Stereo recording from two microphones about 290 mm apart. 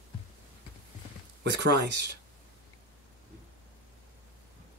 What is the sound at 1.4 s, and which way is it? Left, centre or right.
Speech, right.